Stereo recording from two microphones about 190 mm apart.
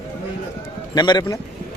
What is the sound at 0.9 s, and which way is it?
Speech, 20° left (ahead or behind).